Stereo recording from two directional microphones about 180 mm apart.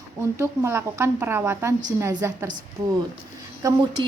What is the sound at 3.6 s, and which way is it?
Speech, 20° right (ahead or behind).